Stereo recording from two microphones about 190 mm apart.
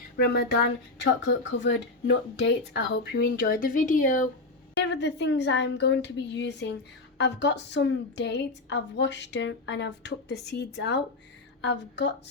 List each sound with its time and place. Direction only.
0.2 s a woman's voice: 55° left (ahead or behind)
1.2 s a woman's voice: 70° left (ahead or behind); by 4.3 s 45° left (ahead or behind)
4.8 s a woman's voice: 65° left (ahead or behind)